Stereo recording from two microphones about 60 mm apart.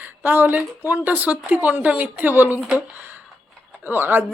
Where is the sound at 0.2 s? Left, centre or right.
Right.